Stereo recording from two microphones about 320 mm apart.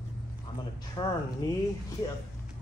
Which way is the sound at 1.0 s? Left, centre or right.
Centre.